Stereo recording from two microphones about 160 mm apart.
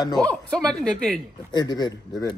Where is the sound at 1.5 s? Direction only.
25° left (ahead or behind).